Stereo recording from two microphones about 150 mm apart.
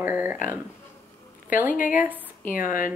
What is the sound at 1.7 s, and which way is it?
Speech, 60° left (ahead or behind).